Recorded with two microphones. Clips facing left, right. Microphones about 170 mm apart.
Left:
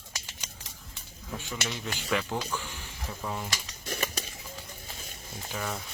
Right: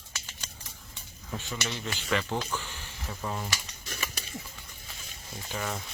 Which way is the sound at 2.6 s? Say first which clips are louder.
Left 1 dB; 10° left (ahead or behind).